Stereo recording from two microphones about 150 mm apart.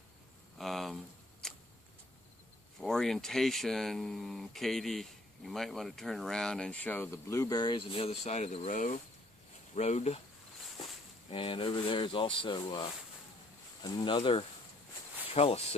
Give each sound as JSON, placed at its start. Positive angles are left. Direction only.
{"t": 0.6, "sound": "a sound", "side_deg": 0}
{"t": 2.8, "sound": "speech", "side_deg": 0}
{"t": 11.2, "sound": "speech", "side_deg": 35}
{"t": 13.8, "sound": "speech", "side_deg": 30}